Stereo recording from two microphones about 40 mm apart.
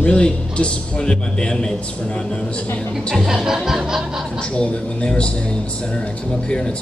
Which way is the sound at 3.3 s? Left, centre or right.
Centre.